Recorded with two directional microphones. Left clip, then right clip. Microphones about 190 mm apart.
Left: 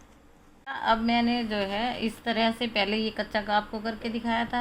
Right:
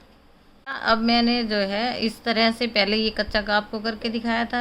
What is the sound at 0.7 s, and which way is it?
A woman's voice, 35° right (ahead or behind).